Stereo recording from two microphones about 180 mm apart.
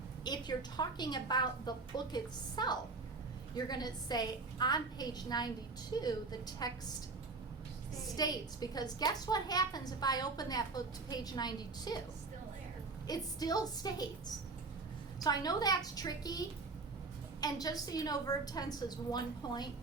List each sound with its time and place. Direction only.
0.3 s a woman's voice: 25° left (ahead or behind)
8.1 s a woman's voice: 20° left (ahead or behind)
13.1 s a woman's voice: 20° left (ahead or behind)
15.2 s a woman's voice: 20° left (ahead or behind)